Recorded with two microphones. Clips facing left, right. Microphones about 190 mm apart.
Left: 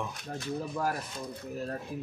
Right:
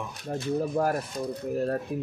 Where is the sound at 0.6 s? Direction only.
50° right (ahead or behind).